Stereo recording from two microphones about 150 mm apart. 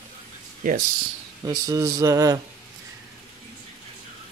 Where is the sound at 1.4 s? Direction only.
25° right (ahead or behind).